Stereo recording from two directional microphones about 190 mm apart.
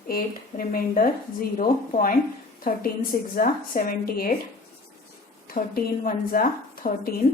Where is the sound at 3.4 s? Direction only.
50° left (ahead or behind).